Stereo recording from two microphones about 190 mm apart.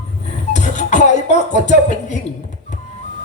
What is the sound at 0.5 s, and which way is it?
Music, 40° left (ahead or behind).